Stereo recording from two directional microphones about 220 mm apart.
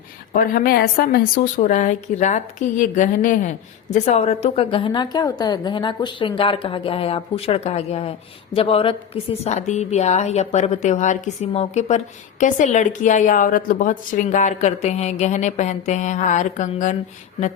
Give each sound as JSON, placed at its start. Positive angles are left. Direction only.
{"t": 0.3, "sound": "a woman's voice", "side_deg": 40}